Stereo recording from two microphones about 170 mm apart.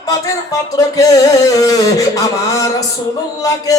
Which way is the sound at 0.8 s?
20° left (ahead or behind).